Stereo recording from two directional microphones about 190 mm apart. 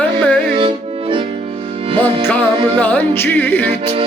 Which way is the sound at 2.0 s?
10° left (ahead or behind).